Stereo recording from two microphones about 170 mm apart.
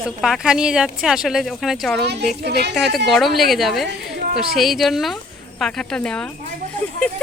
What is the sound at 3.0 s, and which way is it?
Speech, centre (ahead or behind).